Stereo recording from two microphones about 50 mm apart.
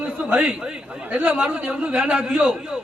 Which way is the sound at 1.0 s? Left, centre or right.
Right.